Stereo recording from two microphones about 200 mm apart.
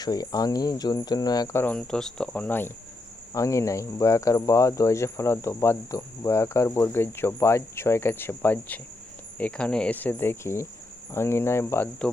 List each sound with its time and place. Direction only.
0.0 s cricket: 20° left (ahead or behind)
3.3 s speech: 15° left (ahead or behind)